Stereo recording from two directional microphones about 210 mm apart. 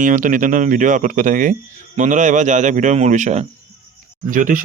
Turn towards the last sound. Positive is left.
turn(degrees=-40)  # may be behind; listen again after turning